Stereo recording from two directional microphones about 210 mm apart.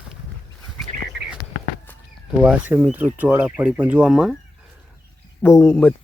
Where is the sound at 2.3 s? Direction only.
5° right (ahead or behind).